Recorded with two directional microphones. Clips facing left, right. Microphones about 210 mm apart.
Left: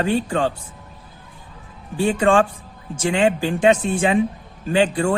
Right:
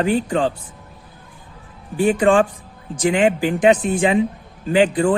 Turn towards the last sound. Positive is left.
turn(degrees=-15)  # may be behind; listen again after turning